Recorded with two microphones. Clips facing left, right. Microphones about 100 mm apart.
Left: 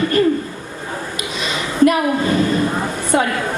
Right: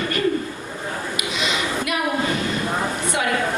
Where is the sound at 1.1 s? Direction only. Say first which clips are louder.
Even; 40° left (ahead or behind).